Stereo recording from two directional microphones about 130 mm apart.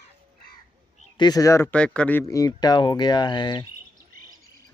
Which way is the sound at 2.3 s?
30° left (ahead or behind).